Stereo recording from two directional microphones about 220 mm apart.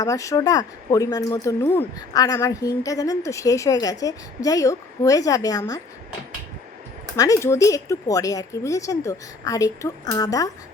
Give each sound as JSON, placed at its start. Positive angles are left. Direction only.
{"t": 0.0, "sound": "speech", "side_deg": 15}
{"t": 7.2, "sound": "speech", "side_deg": 15}